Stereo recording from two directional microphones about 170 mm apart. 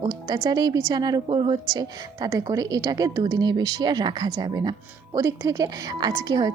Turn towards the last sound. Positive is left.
turn(degrees=-20)  # may be behind; listen again after turning